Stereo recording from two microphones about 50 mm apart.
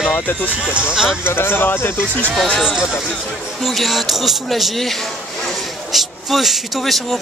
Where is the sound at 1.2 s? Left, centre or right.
Left.